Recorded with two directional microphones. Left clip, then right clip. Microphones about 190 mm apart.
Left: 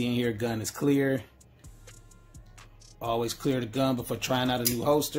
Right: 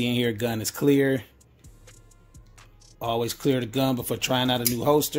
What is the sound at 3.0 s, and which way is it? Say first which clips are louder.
Speech: right 3 dB; 25° right (ahead or behind).